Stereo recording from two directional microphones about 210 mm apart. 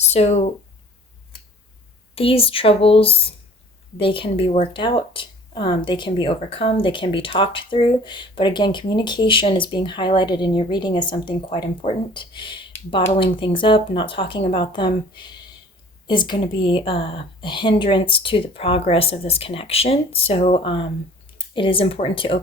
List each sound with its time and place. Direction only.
0.0 s speech: 30° left (ahead or behind)
2.1 s speech: 25° left (ahead or behind)